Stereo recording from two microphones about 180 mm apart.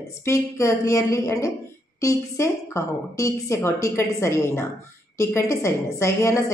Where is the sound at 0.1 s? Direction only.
15° left (ahead or behind).